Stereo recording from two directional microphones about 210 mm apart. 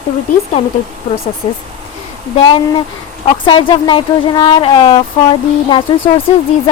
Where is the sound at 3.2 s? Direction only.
25° left (ahead or behind).